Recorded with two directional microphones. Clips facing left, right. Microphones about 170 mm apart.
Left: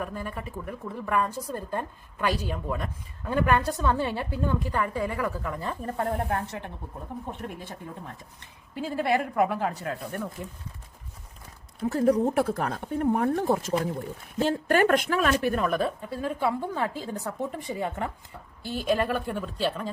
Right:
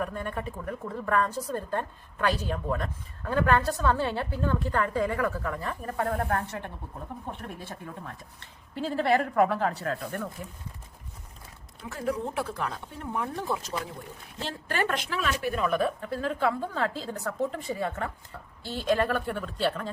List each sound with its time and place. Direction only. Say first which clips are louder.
0.0 s a woman's voice: right 2 dB; 5° left (ahead or behind)
5.5 s a woman's voice: left 1 dB; 25° left (ahead or behind)
11.8 s speech: left 9 dB; 40° left (ahead or behind)
16.0 s a woman's voice: even; 15° left (ahead or behind)